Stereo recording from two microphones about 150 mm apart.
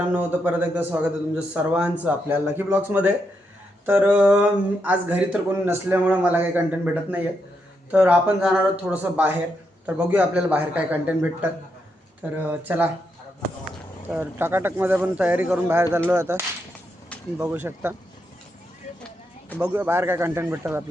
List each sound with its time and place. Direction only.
0.2 s speech: 10° right (ahead or behind)
14.1 s speech: 15° right (ahead or behind)
19.5 s speech: 15° right (ahead or behind)